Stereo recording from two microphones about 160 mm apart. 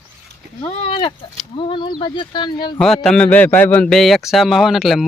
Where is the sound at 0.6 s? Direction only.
40° left (ahead or behind).